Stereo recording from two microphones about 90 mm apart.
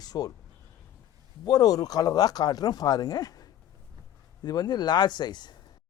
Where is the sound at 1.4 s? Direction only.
45° left (ahead or behind).